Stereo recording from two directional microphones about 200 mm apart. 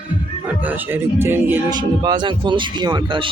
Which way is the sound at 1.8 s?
20° right (ahead or behind).